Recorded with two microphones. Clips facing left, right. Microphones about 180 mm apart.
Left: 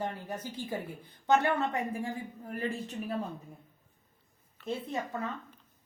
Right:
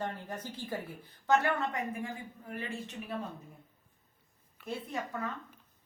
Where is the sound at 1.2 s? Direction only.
25° left (ahead or behind).